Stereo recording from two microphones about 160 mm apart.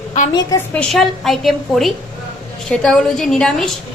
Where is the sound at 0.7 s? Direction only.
5° left (ahead or behind).